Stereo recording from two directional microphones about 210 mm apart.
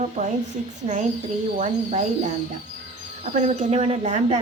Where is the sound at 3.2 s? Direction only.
35° right (ahead or behind).